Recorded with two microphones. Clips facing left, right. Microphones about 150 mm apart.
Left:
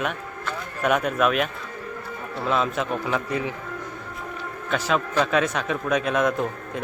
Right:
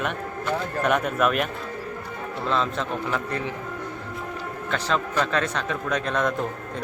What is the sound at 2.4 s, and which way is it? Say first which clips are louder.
A man's voice: left 2 dB; 10° left (ahead or behind).